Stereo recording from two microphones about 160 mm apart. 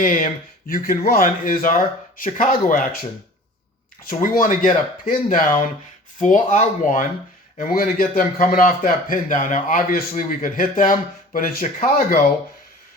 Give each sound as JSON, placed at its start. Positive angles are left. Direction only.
{"t": 0.0, "sound": "a man's voice", "side_deg": 55}
{"t": 4.1, "sound": "a man's voice", "side_deg": 60}